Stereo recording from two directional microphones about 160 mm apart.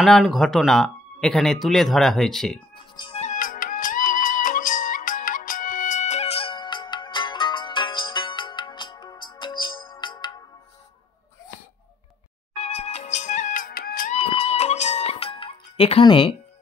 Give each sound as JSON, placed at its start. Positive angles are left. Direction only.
{"t": 0.0, "sound": "speech", "side_deg": 0}
{"t": 3.2, "sound": "music", "side_deg": 55}
{"t": 12.5, "sound": "music", "side_deg": 40}
{"t": 14.1, "sound": "music", "side_deg": 40}